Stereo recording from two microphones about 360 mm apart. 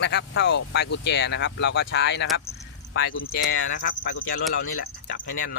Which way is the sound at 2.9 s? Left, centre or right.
Left.